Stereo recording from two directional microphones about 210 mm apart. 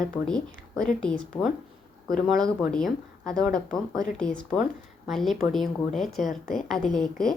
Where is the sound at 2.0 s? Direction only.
5° left (ahead or behind).